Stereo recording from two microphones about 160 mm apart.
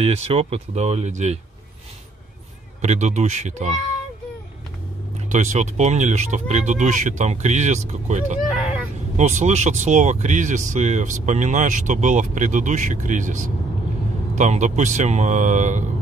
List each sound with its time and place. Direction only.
0.0 s speech: 35° right (ahead or behind)
2.8 s speech: 45° right (ahead or behind)
5.3 s speech: 50° right (ahead or behind)
8.4 s vehicle: centre (ahead or behind)
9.1 s speech: 50° right (ahead or behind)